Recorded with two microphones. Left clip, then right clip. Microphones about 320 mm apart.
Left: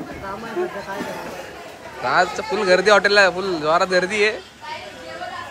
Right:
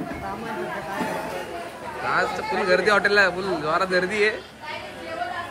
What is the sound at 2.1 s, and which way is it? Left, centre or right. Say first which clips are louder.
Speech: left 5 dB; centre.